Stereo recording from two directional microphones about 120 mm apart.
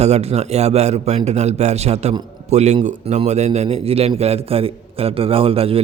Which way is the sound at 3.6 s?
55° right (ahead or behind).